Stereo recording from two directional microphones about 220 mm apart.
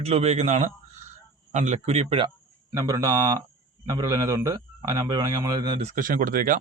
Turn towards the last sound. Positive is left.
turn(degrees=-40)  # may be behind; listen again after turning